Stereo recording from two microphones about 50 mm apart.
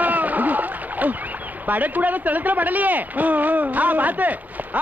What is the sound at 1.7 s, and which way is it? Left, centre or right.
Speech, right.